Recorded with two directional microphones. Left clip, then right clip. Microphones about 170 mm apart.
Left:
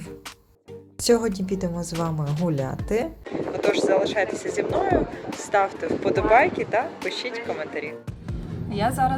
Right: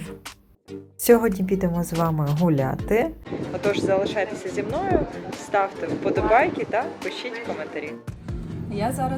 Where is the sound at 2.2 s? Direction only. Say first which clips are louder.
Right 4 dB; 5° left (ahead or behind).